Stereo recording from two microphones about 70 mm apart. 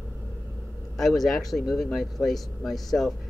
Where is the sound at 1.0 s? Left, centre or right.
Centre.